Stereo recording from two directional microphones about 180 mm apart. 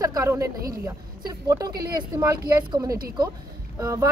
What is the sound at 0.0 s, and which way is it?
A woman's voice, 20° right (ahead or behind).